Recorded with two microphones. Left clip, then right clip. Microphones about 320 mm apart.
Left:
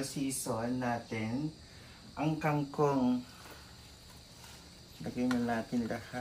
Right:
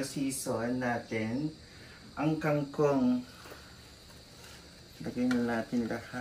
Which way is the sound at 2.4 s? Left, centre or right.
Centre.